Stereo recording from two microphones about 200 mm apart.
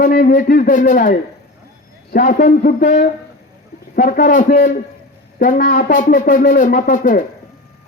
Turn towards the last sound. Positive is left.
turn(degrees=40)  # may be behind; listen again after turning